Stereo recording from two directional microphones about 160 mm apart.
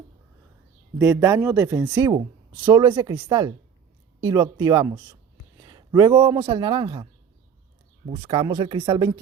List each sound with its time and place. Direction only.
0.9 s a man's voice: 15° right (ahead or behind)
8.2 s a man's voice: 30° right (ahead or behind)